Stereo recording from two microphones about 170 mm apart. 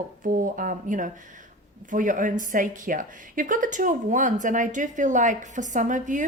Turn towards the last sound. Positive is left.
turn(degrees=-50)  # may be behind; listen again after turning